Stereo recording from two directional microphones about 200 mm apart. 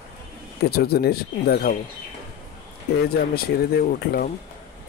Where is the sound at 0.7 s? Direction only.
50° left (ahead or behind).